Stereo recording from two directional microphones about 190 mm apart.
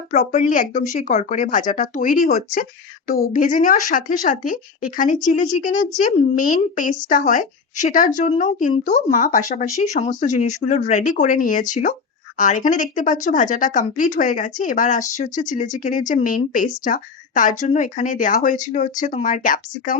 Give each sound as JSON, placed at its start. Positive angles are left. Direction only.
{"t": 0.1, "sound": "speech", "side_deg": 40}